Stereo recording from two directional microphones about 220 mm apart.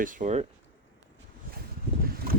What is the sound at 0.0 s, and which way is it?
Speech, 35° right (ahead or behind).